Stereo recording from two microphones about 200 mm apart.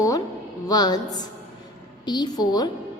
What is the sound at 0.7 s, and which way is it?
A woman's voice, 20° left (ahead or behind).